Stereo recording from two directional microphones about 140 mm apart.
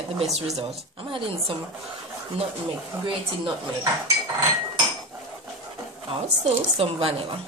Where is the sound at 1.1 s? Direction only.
40° right (ahead or behind).